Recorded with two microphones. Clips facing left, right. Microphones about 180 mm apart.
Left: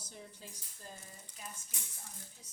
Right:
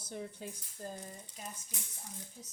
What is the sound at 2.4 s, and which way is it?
Speech, 40° right (ahead or behind).